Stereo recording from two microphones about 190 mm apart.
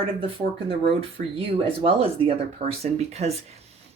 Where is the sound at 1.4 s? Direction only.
30° right (ahead or behind).